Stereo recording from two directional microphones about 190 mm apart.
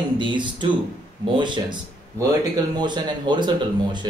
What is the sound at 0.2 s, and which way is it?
Speech, 25° right (ahead or behind).